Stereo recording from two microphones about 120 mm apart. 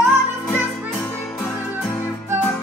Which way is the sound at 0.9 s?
15° left (ahead or behind).